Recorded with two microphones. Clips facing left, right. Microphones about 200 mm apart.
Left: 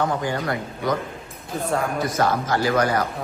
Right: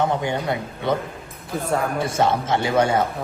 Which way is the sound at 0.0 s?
20° right (ahead or behind).